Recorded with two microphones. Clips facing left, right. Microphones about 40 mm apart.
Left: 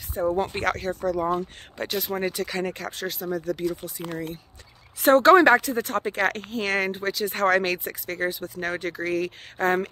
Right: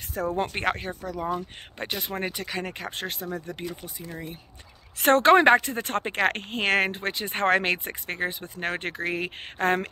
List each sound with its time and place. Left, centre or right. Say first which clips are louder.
0.2 s speech: left 4 dB; right
0.6 s speech: left 2 dB; right
2.4 s speech: left 4 dB; centre
2.9 s speech: left 3 dB; right
3.4 s speech: left 8 dB; right
4.0 s speech: left 6 dB; left
4.9 s speech: left 2 dB; right
7.2 s speech: left 1 dB; right